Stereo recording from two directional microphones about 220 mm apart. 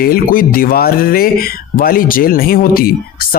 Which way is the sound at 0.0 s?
40° left (ahead or behind).